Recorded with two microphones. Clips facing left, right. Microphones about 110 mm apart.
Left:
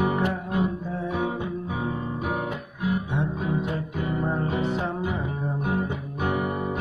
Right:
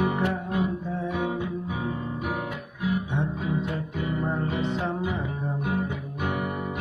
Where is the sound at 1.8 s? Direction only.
35° left (ahead or behind).